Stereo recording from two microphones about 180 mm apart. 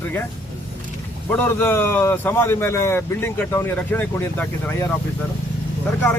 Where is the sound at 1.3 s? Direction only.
10° left (ahead or behind).